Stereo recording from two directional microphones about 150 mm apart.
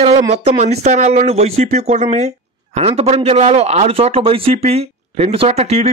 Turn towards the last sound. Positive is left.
turn(degrees=-45)  # may be behind; listen again after turning